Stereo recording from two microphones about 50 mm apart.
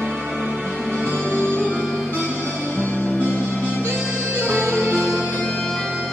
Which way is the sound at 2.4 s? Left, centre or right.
Left.